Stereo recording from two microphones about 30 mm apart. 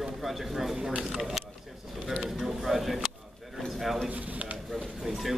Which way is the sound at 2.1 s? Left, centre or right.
Centre.